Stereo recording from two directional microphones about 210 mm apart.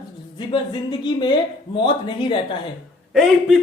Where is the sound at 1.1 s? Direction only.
20° left (ahead or behind).